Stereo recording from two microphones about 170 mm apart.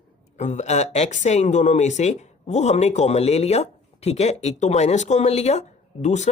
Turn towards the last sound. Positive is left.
turn(degrees=40)  # may be behind; listen again after turning